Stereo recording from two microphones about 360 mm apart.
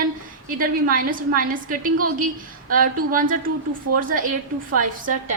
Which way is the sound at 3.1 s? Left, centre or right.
Right.